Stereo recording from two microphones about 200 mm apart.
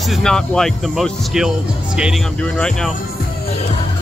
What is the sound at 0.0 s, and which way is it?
Speech, centre (ahead or behind).